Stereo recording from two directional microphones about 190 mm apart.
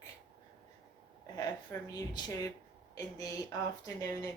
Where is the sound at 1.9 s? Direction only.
20° left (ahead or behind).